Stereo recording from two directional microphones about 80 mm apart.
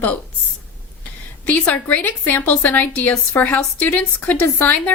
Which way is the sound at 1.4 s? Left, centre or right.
Left.